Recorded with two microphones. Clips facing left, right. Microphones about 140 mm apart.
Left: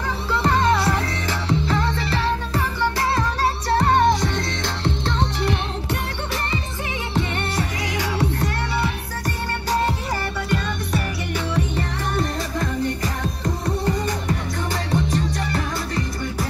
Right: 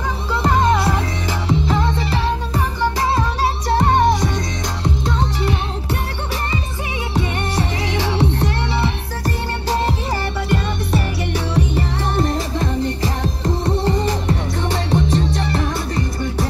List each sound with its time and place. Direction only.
0.3 s music: 15° right (ahead or behind)
7.8 s music: 30° right (ahead or behind)